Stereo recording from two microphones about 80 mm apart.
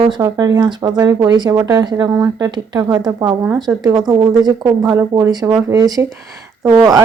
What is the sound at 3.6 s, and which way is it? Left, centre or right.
Speech, right.